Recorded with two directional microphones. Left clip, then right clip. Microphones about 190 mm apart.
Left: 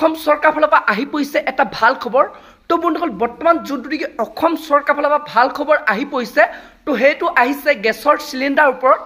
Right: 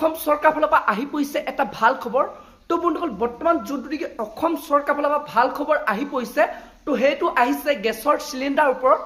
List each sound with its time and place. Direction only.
0.0 s a woman's voice: 40° left (ahead or behind)